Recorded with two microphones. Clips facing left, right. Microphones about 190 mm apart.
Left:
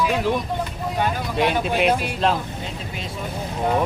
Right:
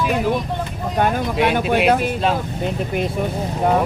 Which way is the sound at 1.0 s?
55° right (ahead or behind).